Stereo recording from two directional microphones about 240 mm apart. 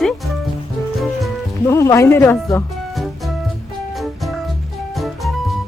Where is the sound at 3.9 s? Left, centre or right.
Centre.